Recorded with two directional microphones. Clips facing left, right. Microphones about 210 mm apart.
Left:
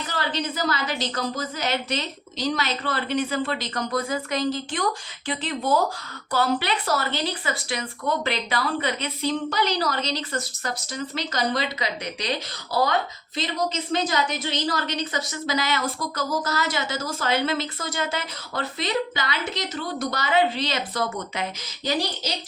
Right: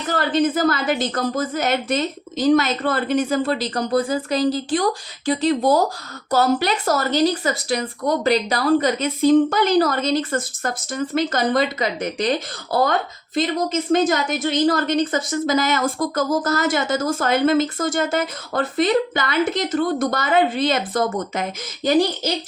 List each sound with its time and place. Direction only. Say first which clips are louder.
0.1 s speech: right 11 dB; 50° right (ahead or behind)